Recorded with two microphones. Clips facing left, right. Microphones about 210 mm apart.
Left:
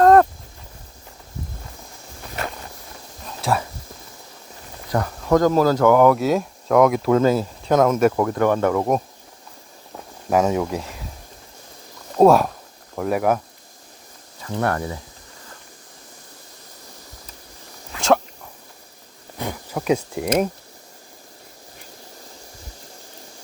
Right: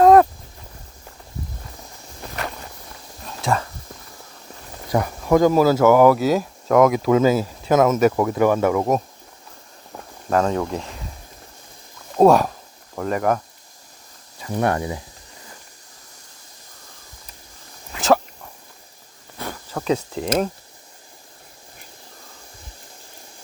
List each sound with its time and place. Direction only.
0.0 s a sound: 5° right (ahead or behind)
3.2 s whispering: centre (ahead or behind)
4.9 s speech: 10° right (ahead or behind)
10.2 s speech: 10° left (ahead or behind)
12.1 s speech: centre (ahead or behind)
14.4 s speech: 15° right (ahead or behind)
19.4 s a sound: 15° left (ahead or behind)